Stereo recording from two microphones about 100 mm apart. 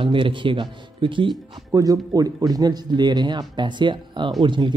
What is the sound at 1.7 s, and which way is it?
Speech, 35° right (ahead or behind).